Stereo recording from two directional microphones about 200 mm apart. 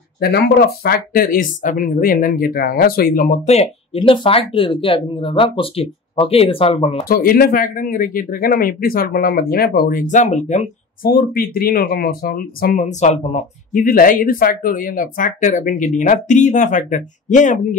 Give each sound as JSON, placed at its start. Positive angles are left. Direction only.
{"t": 0.2, "sound": "speech", "side_deg": 50}
{"t": 7.1, "sound": "speech", "side_deg": 45}